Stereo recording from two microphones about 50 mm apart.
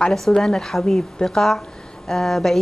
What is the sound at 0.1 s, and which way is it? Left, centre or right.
A woman's voice, centre.